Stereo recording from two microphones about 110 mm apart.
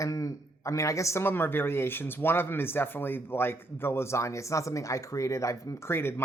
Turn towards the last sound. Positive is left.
turn(degrees=20)  # may be behind; listen again after turning